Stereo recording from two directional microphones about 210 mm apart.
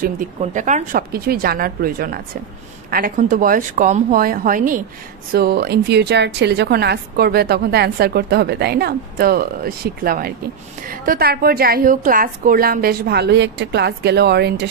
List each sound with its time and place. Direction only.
0.0 s a woman's voice: 40° right (ahead or behind)